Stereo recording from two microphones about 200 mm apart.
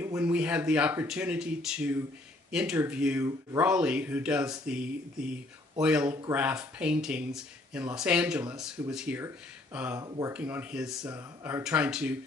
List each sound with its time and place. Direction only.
0.0 s speech: 10° right (ahead or behind)
9.9 s speech: 20° right (ahead or behind)
10.3 s speech: 10° right (ahead or behind)